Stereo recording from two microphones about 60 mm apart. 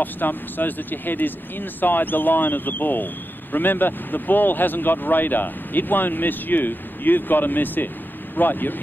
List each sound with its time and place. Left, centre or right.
0.0 s speech: left